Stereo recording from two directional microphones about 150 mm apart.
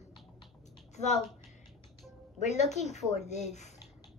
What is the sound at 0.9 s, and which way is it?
Speech, 50° left (ahead or behind).